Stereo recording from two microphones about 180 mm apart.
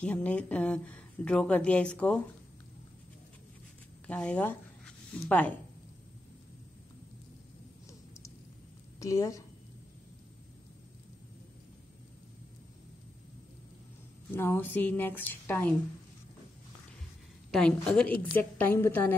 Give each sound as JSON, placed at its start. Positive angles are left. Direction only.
{"t": 0.0, "sound": "speech", "side_deg": 5}
{"t": 4.1, "sound": "speech", "side_deg": 5}
{"t": 9.0, "sound": "speech", "side_deg": 15}
{"t": 14.3, "sound": "speech", "side_deg": 15}
{"t": 17.5, "sound": "speech", "side_deg": 5}